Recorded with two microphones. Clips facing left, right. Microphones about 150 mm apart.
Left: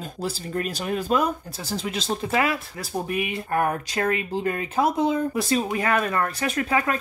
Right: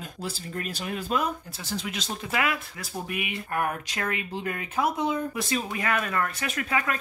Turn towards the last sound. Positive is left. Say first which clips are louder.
# left 5 dB
turn(degrees=35)  # may be behind; listen again after turning